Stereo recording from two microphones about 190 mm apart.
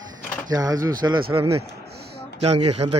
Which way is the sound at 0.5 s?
20° right (ahead or behind).